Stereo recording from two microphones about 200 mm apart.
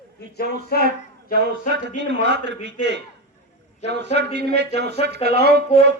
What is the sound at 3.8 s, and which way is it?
Speech, 60° right (ahead or behind).